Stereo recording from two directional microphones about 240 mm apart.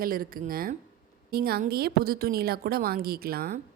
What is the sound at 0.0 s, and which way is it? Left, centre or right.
Speech, right.